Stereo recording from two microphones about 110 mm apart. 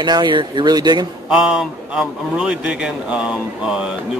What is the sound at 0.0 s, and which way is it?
Speech, 40° right (ahead or behind).